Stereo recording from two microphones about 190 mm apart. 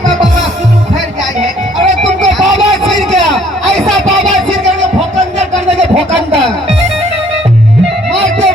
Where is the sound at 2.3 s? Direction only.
Centre (ahead or behind).